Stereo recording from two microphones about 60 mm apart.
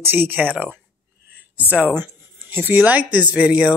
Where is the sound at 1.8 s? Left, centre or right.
Right.